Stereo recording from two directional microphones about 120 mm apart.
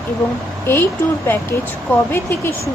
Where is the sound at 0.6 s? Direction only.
20° left (ahead or behind).